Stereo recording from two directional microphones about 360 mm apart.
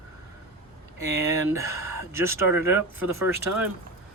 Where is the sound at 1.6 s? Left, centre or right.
Centre.